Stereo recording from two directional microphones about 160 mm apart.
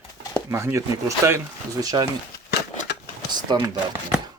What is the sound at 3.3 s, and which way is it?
Speech, 25° right (ahead or behind).